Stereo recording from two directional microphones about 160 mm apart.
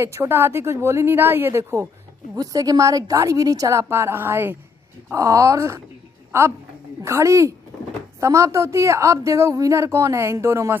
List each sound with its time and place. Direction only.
0.0 s a woman's voice: 15° right (ahead or behind)
7.0 s a woman's voice: 20° right (ahead or behind)